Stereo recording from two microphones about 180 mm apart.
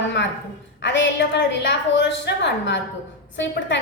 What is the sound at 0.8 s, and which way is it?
A woman's voice, 75° left (ahead or behind).